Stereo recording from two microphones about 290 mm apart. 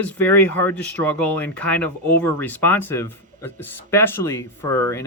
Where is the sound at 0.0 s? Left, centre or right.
Centre.